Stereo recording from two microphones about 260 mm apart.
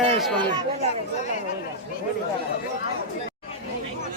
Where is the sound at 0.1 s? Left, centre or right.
Right.